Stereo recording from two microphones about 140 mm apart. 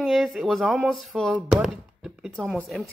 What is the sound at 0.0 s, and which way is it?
Speech, centre (ahead or behind).